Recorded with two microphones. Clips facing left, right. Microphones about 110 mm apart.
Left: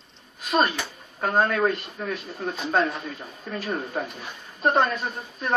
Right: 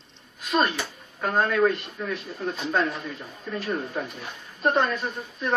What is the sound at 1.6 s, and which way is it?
Speech, 40° left (ahead or behind).